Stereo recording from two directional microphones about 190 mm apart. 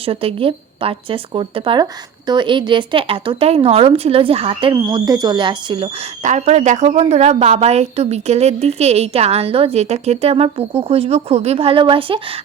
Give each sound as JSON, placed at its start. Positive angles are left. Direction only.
{"t": 0.0, "sound": "a woman's voice", "side_deg": -30}